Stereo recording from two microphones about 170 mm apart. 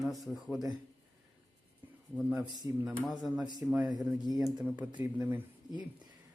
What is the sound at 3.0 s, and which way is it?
Speech, centre (ahead or behind).